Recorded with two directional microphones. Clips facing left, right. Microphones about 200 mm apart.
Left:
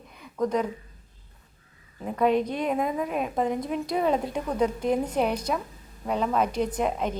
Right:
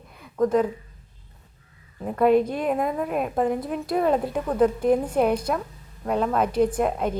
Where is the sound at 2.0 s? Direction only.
5° right (ahead or behind).